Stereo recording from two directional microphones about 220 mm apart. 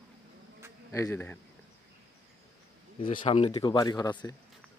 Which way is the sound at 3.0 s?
25° left (ahead or behind).